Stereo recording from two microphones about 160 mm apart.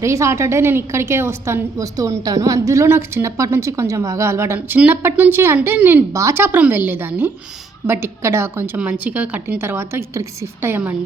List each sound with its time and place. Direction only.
0.0 s a woman's voice: 20° right (ahead or behind)